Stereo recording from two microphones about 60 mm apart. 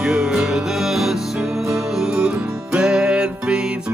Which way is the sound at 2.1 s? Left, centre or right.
Centre.